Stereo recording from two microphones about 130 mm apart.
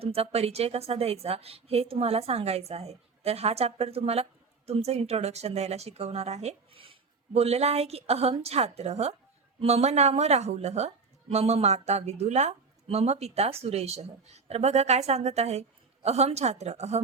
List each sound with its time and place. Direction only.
0.0 s a woman's voice: 50° right (ahead or behind)